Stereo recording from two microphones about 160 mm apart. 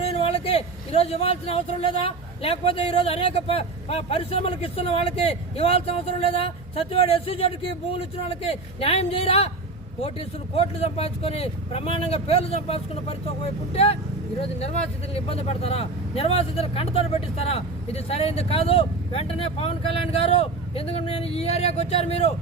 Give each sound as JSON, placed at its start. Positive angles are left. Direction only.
{"t": 0.0, "sound": "a man's voice", "side_deg": 35}